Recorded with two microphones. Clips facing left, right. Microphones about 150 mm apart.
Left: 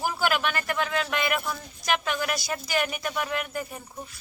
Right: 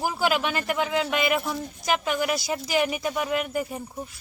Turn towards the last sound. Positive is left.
turn(degrees=-15)  # may be behind; listen again after turning